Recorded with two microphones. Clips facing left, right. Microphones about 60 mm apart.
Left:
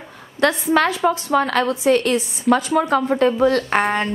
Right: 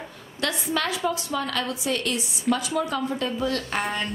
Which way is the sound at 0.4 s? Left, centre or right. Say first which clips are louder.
Left 10 dB; left.